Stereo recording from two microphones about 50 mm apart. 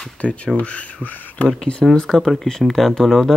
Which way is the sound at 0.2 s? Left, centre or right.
Left.